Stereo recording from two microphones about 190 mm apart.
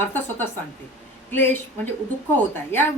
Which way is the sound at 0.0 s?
10° left (ahead or behind).